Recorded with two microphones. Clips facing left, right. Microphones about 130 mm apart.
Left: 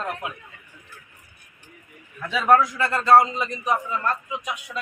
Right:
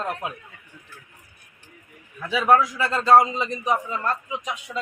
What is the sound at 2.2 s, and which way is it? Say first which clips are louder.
A man's voice: even; 5° right (ahead or behind).